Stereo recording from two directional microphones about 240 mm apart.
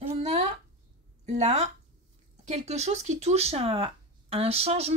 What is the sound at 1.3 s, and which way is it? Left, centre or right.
Speech, right.